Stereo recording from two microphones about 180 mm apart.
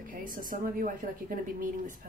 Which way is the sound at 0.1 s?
50° right (ahead or behind).